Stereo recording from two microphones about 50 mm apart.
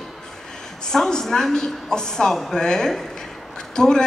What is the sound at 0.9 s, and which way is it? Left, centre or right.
A man's voice, centre.